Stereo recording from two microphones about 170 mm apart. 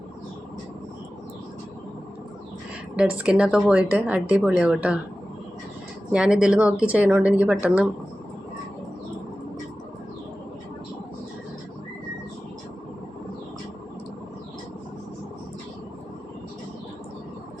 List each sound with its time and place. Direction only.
2.9 s speech: 5° right (ahead or behind)
6.1 s speech: 5° right (ahead or behind)